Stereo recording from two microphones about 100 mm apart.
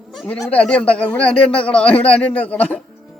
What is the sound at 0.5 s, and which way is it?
A man's voice, 10° left (ahead or behind).